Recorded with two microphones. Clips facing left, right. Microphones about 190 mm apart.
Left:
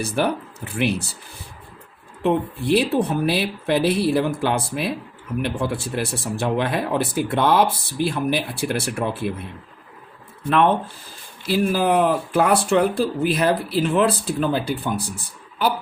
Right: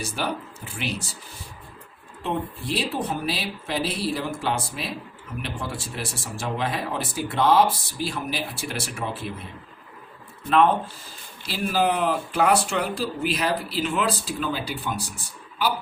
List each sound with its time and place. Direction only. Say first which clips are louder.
0.0 s speech: left 7 dB; 60° left (ahead or behind)
2.2 s speech: left 8 dB; 60° left (ahead or behind)
11.4 s speech: left 4 dB; 50° left (ahead or behind)